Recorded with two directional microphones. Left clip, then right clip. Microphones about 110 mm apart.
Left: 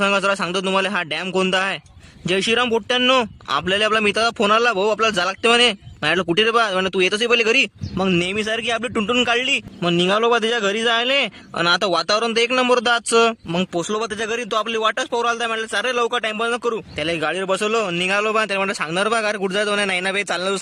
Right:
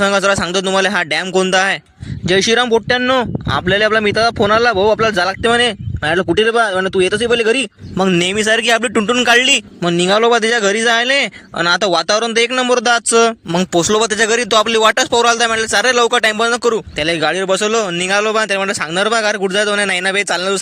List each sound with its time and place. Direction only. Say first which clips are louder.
0.0 s speech: right 5 dB; 30° right (ahead or behind)
3.0 s speech: right 2 dB; centre (ahead or behind)
3.7 s speech: right 5 dB; 25° right (ahead or behind)
8.2 s speech: right 8 dB; 45° right (ahead or behind); by 13.7 s 25° right (ahead or behind)
13.7 s speech: right 13 dB; 40° right (ahead or behind); by 20.6 s 25° right (ahead or behind)